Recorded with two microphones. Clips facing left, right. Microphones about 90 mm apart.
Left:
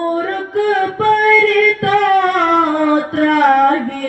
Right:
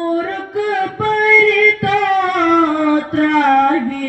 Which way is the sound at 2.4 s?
15° left (ahead or behind).